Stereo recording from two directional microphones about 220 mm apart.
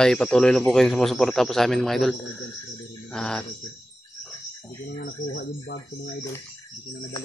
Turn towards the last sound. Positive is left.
turn(degrees=45)  # may be behind; listen again after turning